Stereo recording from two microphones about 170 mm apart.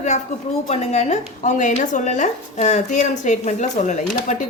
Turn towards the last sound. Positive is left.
turn(degrees=45)  # may be behind; listen again after turning